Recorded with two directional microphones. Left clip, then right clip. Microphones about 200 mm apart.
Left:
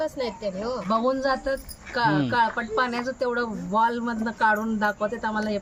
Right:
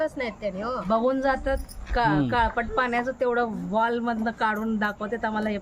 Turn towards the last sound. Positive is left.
turn(degrees=-5)  # may be behind; listen again after turning